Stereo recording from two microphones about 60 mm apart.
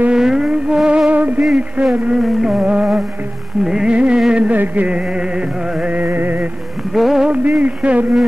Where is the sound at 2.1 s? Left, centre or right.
Centre.